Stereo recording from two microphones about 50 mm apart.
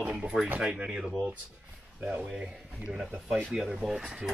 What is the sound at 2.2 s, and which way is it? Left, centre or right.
Speech, centre.